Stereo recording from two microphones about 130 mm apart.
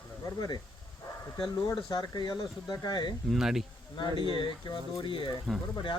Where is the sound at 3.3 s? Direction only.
5° right (ahead or behind).